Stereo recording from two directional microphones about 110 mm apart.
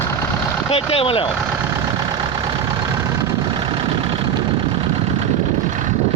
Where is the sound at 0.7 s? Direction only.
60° left (ahead or behind).